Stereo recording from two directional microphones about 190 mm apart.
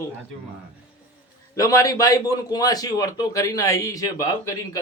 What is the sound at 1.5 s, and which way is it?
A man's voice, 15° left (ahead or behind).